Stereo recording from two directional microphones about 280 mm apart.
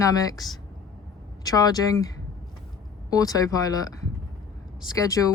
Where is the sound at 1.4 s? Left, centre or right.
Centre.